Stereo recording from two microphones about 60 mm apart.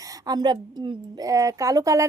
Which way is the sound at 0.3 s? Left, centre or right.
Right.